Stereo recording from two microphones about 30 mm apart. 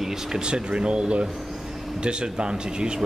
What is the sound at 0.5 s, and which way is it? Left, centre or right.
Speech, right.